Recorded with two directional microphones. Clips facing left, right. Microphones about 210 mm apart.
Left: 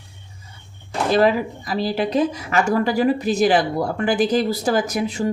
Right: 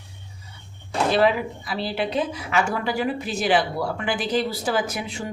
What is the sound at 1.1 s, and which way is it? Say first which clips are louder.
A woman's voice: left 4 dB; 45° left (ahead or behind).